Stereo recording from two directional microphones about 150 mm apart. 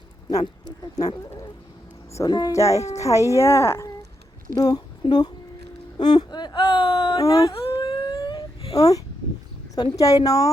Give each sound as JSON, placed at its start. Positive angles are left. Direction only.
{"t": 0.9, "sound": "speech", "side_deg": 25}
{"t": 6.0, "sound": "whimper", "side_deg": 30}
{"t": 7.2, "sound": "speech", "side_deg": 20}
{"t": 7.5, "sound": "wail", "side_deg": 40}
{"t": 9.7, "sound": "speech", "side_deg": 25}